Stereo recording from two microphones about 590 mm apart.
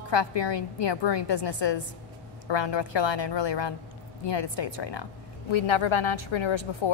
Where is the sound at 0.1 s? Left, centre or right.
Left.